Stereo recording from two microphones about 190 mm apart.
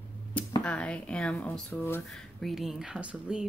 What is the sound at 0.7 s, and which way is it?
Speech, 5° left (ahead or behind).